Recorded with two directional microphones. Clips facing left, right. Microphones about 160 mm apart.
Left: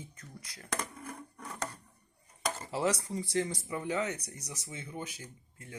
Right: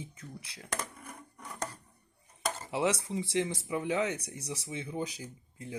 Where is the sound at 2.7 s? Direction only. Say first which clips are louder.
Right 2 dB; 25° right (ahead or behind).